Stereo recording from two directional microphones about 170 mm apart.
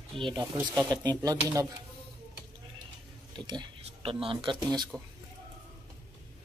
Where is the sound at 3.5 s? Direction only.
30° right (ahead or behind).